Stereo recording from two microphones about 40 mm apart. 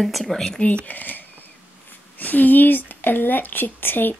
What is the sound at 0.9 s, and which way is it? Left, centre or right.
A woman's voice, left.